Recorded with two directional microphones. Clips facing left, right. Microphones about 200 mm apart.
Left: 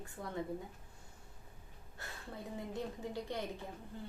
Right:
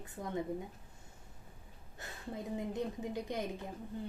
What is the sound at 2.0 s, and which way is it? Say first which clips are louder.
A woman's voice: right 4 dB; 20° right (ahead or behind).